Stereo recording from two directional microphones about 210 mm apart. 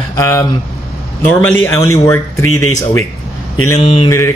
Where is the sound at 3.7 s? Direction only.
25° left (ahead or behind).